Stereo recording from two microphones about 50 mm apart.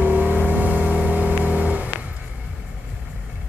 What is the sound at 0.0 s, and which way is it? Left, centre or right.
Vehicle, right.